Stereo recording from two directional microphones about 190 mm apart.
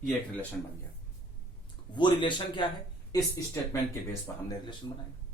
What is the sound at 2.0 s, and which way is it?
Speech, 25° left (ahead or behind).